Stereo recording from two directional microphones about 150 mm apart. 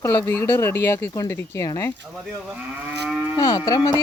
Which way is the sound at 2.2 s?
5° right (ahead or behind).